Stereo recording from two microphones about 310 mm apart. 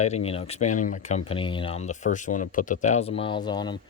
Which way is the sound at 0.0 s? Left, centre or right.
Left.